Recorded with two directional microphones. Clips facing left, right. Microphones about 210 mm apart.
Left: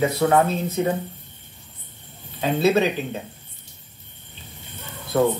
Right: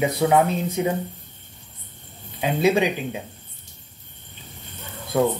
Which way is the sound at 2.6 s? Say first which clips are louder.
Even; 15° right (ahead or behind).